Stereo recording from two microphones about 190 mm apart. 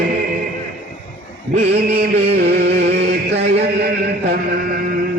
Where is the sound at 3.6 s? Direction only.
55° right (ahead or behind).